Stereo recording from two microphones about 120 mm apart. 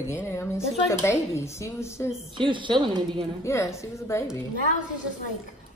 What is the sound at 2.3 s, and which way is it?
Speech, 40° right (ahead or behind).